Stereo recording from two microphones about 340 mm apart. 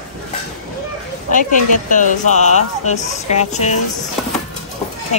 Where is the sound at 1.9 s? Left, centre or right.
Left.